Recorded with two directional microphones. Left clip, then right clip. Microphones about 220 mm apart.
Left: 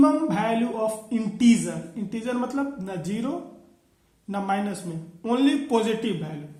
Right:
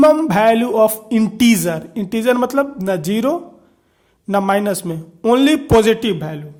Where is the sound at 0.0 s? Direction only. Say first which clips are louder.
Right 11 dB; 45° right (ahead or behind).